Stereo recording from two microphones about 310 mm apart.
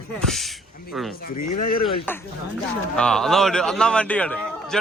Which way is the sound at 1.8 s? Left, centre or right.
Centre.